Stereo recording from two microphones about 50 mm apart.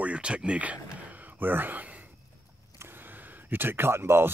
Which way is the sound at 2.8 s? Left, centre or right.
Right.